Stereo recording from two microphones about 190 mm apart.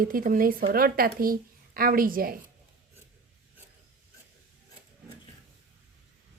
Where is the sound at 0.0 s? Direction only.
45° right (ahead or behind).